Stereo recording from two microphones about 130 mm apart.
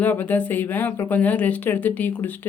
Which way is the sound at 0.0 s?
15° left (ahead or behind).